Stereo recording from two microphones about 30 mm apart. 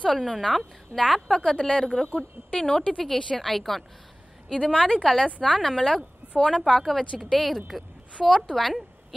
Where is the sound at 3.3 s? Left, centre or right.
Centre.